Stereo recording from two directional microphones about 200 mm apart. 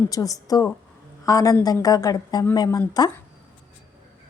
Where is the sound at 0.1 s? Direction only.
20° left (ahead or behind).